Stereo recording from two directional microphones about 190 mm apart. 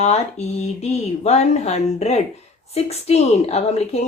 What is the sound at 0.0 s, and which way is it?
A woman's voice, 35° left (ahead or behind).